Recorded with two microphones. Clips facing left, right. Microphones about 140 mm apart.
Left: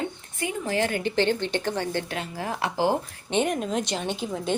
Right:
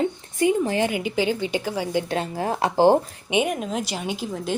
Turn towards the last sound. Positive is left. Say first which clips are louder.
# right 1 dB
turn(degrees=-5)  # may be behind; listen again after turning